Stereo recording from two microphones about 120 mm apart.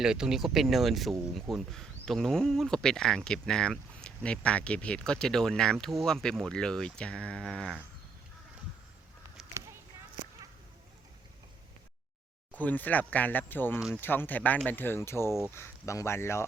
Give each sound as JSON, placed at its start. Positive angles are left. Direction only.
{"t": 0.0, "sound": "speech", "side_deg": -5}
{"t": 12.5, "sound": "speech", "side_deg": 15}